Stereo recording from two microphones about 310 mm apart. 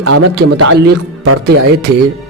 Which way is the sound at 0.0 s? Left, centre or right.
Right.